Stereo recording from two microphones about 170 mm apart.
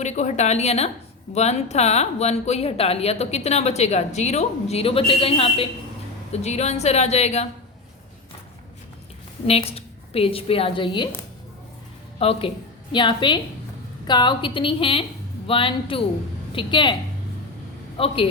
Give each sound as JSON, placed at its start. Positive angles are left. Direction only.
{"t": 0.0, "sound": "speech", "side_deg": 45}
{"t": 9.5, "sound": "a woman's voice", "side_deg": 35}
{"t": 12.2, "sound": "a woman's voice", "side_deg": 35}
{"t": 17.9, "sound": "a man's voice", "side_deg": 35}